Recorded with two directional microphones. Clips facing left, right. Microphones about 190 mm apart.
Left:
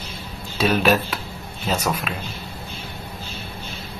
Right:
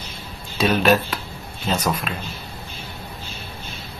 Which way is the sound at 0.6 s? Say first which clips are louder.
Right 1 dB; 10° left (ahead or behind).